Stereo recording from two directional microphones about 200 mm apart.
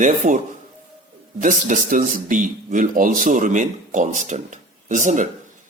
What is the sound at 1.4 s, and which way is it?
A man's voice, 40° right (ahead or behind).